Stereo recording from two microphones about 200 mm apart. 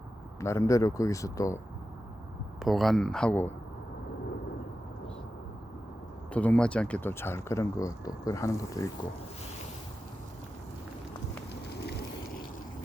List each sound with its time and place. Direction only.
0.3 s speech: 15° left (ahead or behind)
2.6 s speech: centre (ahead or behind)
6.3 s speech: 5° left (ahead or behind)
11.7 s vehicle: 55° left (ahead or behind)